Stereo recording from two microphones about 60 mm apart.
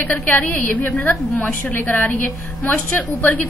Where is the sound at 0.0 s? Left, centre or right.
Left.